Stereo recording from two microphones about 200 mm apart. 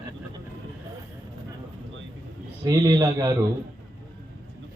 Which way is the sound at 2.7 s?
20° right (ahead or behind).